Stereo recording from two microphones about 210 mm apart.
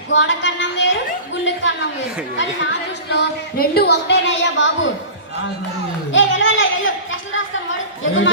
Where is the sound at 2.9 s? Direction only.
55° left (ahead or behind).